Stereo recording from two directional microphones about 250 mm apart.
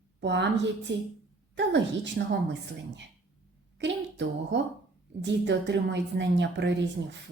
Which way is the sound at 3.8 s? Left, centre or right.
Right.